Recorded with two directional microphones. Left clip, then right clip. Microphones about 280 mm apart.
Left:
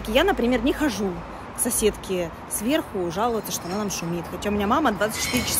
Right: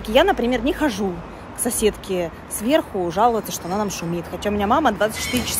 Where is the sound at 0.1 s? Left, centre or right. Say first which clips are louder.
Right 4 dB; centre.